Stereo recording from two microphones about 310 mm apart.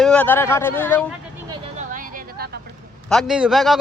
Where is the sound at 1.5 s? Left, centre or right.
Right.